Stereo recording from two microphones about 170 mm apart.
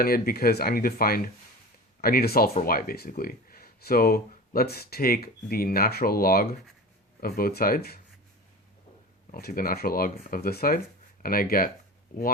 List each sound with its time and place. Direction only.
0.0 s speech: 60° left (ahead or behind)
9.3 s speech: 60° left (ahead or behind)